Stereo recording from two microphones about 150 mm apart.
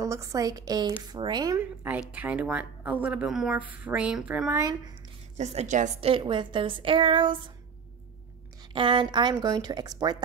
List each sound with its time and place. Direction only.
0.0 s speech: 20° right (ahead or behind)
1.6 s a woman's voice: 10° right (ahead or behind)
4.6 s speech: 25° right (ahead or behind)
5.4 s a woman's voice: 45° right (ahead or behind)
5.9 s a woman's voice: 35° right (ahead or behind)
8.7 s speech: 30° right (ahead or behind)